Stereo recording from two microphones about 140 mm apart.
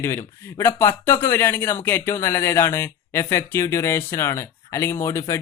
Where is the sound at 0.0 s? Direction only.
20° left (ahead or behind).